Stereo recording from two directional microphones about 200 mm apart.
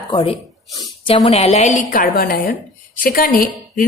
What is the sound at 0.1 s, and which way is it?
A woman's voice, 30° left (ahead or behind).